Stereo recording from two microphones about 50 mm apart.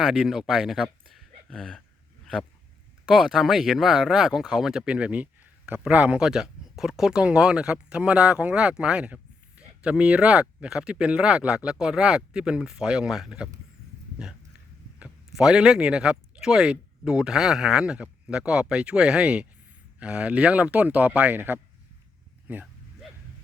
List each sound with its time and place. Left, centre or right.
0.0 s speech: centre
1.5 s speech: centre
3.1 s speech: centre
4.9 s a sound: right
5.9 s speech: right; by 13.3 s centre
15.4 s speech: centre; by 21.6 s right